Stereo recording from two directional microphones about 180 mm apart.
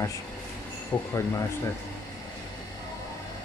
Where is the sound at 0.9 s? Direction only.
15° left (ahead or behind).